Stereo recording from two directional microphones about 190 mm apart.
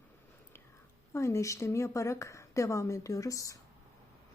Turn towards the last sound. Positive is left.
turn(degrees=15)  # may be behind; listen again after turning